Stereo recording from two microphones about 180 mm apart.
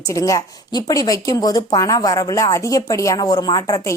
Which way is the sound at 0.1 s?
20° left (ahead or behind).